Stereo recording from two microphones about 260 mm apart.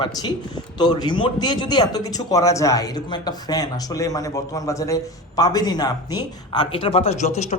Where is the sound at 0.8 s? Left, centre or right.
Centre.